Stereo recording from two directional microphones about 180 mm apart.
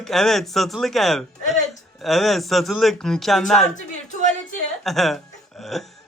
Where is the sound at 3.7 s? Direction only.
40° left (ahead or behind).